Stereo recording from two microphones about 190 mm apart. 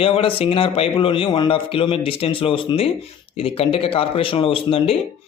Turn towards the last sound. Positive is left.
turn(degrees=30)  # may be behind; listen again after turning